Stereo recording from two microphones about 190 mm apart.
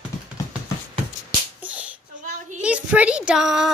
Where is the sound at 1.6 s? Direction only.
5° right (ahead or behind).